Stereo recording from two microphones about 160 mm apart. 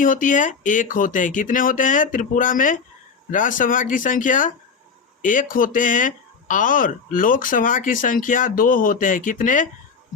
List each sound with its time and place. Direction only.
0.0 s speech: 55° left (ahead or behind)